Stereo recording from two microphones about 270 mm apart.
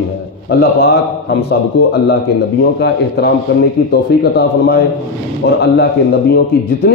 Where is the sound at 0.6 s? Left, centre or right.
Left.